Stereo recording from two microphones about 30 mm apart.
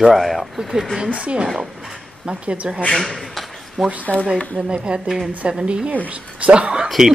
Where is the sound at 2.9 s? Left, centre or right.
Centre.